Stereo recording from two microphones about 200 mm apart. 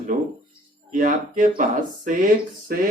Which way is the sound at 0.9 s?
40° right (ahead or behind).